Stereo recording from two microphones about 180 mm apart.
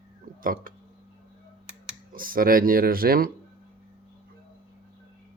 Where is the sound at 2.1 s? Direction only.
55° right (ahead or behind).